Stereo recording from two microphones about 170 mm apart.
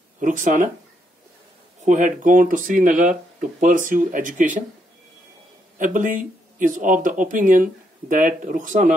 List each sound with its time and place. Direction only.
0.2 s speech: 50° right (ahead or behind)
1.9 s speech: 50° right (ahead or behind)
5.8 s speech: 50° right (ahead or behind)